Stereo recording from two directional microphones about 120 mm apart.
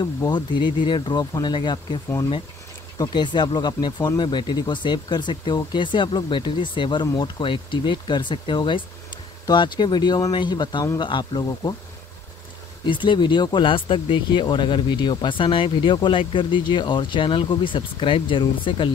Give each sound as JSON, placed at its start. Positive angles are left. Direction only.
{"t": 0.3, "sound": "speech", "side_deg": 40}
{"t": 3.0, "sound": "speech", "side_deg": 35}
{"t": 12.8, "sound": "speech", "side_deg": 40}